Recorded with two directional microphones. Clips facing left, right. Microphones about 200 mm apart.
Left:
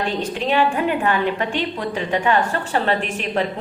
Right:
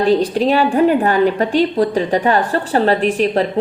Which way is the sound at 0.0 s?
35° right (ahead or behind).